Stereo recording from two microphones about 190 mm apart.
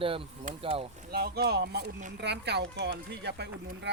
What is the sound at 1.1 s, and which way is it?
Speech, 55° right (ahead or behind).